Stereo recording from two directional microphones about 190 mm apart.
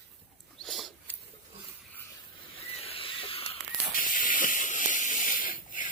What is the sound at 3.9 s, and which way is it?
Hiss, 45° left (ahead or behind).